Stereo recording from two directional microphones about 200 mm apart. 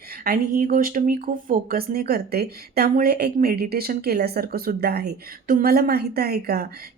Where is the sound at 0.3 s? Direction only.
45° right (ahead or behind).